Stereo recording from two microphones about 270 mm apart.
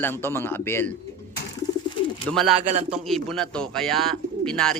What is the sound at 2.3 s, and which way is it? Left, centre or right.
Speech, centre.